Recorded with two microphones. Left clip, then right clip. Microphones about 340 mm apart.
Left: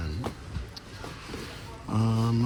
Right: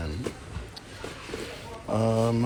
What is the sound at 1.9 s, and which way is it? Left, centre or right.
Speech, centre.